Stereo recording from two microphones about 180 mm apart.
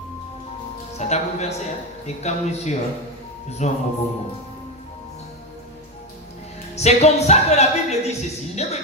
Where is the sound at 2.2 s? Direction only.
40° left (ahead or behind).